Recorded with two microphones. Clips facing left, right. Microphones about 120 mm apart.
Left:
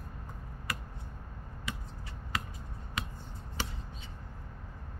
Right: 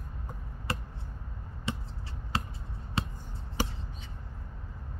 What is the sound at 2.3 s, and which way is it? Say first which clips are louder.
Basketball bounce: right 3 dB; 30° right (ahead or behind).